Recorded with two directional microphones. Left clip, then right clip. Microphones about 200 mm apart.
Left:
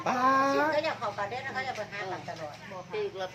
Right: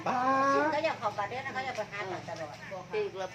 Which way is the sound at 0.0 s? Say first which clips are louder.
Left 2 dB; 30° left (ahead or behind).